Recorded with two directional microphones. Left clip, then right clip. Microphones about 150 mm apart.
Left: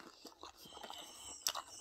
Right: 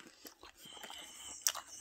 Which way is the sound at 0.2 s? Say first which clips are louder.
Left 1 dB; 15° right (ahead or behind).